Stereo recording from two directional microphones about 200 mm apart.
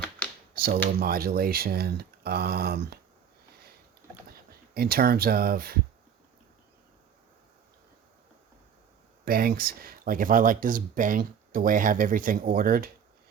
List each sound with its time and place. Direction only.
0.5 s speech: 45° right (ahead or behind)
4.3 s speech: 50° right (ahead or behind)
9.2 s speech: 50° right (ahead or behind)